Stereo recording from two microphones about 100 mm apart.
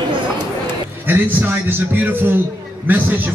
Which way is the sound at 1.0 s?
20° right (ahead or behind).